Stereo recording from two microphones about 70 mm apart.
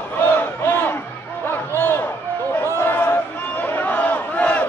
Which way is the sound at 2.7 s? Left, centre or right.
Left.